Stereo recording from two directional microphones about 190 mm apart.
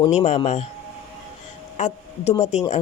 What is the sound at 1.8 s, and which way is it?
Speech, 35° left (ahead or behind).